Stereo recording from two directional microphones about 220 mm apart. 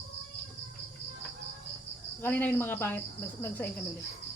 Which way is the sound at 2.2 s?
10° left (ahead or behind).